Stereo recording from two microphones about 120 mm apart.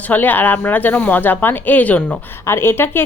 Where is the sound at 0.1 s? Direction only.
15° left (ahead or behind).